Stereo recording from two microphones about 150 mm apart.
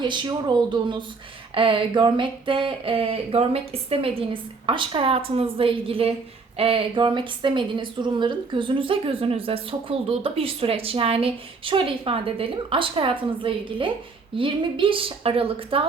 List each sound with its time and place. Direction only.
0.0 s a woman's voice: 30° right (ahead or behind)